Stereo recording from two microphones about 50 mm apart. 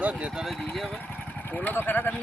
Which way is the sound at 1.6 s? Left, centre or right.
Left.